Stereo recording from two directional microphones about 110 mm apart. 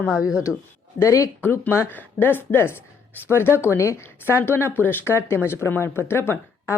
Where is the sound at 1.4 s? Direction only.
20° left (ahead or behind).